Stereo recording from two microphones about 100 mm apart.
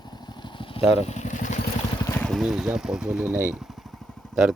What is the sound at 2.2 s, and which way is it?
Speech, centre (ahead or behind).